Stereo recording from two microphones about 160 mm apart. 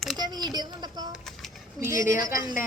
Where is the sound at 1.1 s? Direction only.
Centre (ahead or behind).